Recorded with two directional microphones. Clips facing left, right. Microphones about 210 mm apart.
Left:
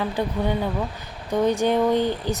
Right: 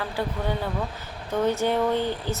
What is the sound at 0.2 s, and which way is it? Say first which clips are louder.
Speech: left 1 dB; 20° left (ahead or behind).